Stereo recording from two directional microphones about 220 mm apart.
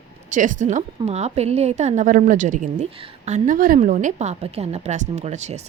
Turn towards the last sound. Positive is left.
turn(degrees=-30)  # may be behind; listen again after turning